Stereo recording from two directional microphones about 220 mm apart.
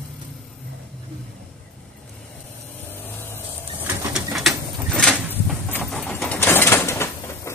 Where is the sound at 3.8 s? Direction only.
Centre (ahead or behind).